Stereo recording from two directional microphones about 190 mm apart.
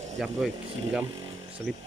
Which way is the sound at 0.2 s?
Centre (ahead or behind).